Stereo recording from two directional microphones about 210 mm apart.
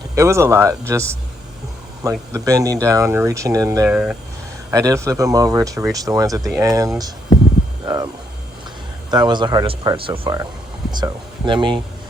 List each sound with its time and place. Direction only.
0.2 s speech: 15° right (ahead or behind)
2.3 s speech: 15° right (ahead or behind)
4.7 s speech: 15° right (ahead or behind)